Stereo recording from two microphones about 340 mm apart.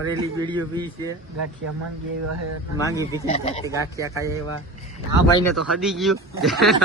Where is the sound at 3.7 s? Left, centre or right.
Centre.